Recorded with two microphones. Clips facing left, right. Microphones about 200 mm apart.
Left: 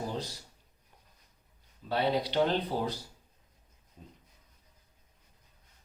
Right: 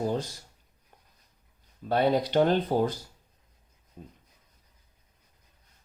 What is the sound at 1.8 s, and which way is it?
Speech, 50° right (ahead or behind).